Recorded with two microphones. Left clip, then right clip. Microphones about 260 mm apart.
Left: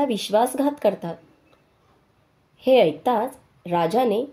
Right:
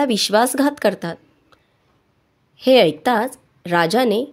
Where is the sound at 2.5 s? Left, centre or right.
Right.